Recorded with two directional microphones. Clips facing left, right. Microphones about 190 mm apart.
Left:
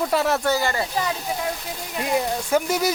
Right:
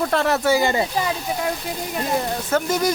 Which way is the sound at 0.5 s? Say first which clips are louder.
Right 4 dB; 15° right (ahead or behind).